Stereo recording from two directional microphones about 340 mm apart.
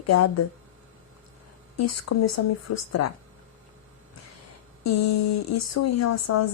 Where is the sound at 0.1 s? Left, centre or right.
Left.